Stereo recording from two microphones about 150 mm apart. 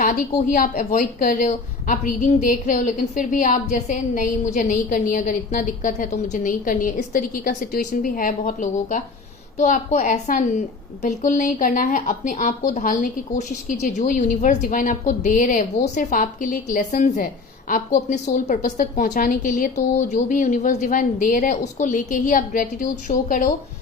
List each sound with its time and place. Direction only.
0.0 s a woman's voice: 55° left (ahead or behind)